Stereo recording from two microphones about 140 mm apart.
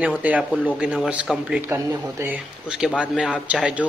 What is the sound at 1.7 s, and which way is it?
Speech, 20° right (ahead or behind).